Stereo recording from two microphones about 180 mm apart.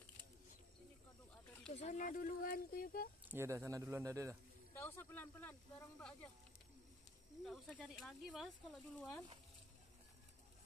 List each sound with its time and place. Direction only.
1.7 s speech: 40° left (ahead or behind)
3.3 s speech: 15° right (ahead or behind)
4.7 s speech: 10° left (ahead or behind)
7.4 s speech: centre (ahead or behind)